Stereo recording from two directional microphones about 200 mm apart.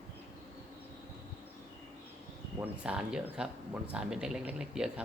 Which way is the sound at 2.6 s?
5° right (ahead or behind).